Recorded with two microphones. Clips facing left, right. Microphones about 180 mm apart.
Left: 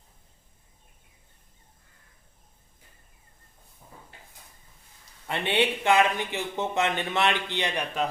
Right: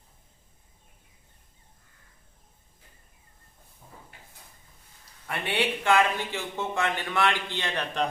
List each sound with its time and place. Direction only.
5.3 s speech: 20° left (ahead or behind)